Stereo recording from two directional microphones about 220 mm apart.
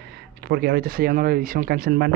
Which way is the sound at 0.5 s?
45° right (ahead or behind).